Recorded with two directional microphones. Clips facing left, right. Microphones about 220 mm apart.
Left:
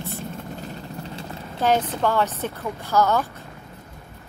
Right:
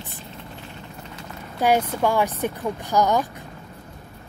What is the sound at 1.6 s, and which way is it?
A woman's voice, 10° right (ahead or behind).